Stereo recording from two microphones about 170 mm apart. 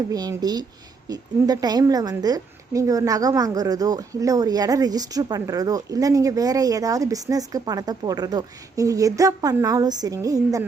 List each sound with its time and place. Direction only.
0.1 s a woman's voice: 20° right (ahead or behind)